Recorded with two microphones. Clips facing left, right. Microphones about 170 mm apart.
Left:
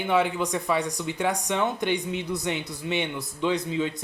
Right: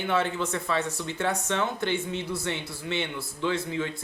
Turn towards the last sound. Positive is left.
turn(degrees=20)  # may be behind; listen again after turning